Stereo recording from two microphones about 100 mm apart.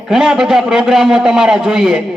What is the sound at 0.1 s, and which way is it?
A man's voice, 5° right (ahead or behind).